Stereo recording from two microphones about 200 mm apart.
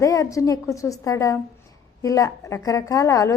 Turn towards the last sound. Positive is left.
turn(degrees=15)  # may be behind; listen again after turning